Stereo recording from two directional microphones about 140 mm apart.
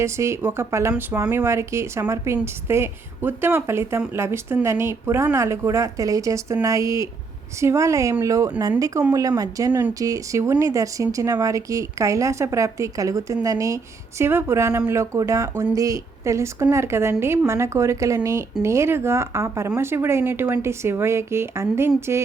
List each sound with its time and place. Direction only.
0.0 s speech: 20° right (ahead or behind)